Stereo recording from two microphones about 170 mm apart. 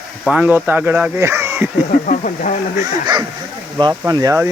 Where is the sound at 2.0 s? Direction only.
50° left (ahead or behind).